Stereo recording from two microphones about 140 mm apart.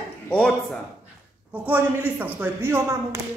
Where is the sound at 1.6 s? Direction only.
10° right (ahead or behind).